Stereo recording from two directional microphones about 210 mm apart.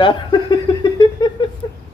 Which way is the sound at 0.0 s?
20° left (ahead or behind).